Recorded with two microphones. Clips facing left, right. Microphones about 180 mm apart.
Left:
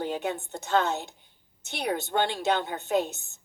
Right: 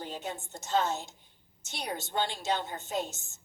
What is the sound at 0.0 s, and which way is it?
A woman's voice, 65° left (ahead or behind).